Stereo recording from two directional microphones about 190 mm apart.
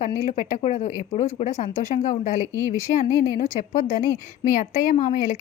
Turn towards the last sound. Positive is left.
turn(degrees=45)  # may be behind; listen again after turning